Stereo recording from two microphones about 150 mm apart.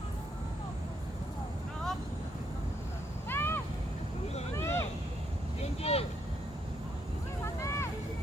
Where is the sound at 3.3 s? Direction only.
15° left (ahead or behind).